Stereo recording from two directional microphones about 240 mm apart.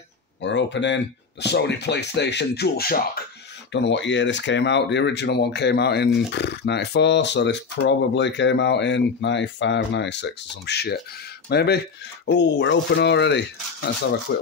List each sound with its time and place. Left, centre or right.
0.4 s speech: left